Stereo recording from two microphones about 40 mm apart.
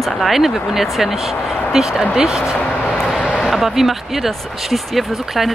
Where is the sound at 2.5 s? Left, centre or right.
Left.